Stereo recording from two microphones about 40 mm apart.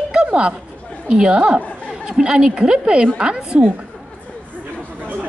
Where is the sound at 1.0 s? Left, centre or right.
Right.